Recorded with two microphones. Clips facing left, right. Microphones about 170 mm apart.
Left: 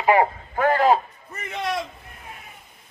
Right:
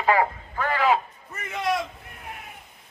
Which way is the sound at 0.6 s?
45° left (ahead or behind).